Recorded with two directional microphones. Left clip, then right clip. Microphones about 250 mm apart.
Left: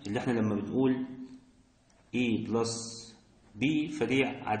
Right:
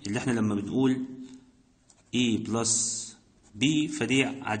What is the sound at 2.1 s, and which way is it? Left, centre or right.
A man's voice, right.